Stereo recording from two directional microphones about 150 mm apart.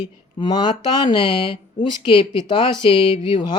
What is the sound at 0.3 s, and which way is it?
Speech, 30° left (ahead or behind).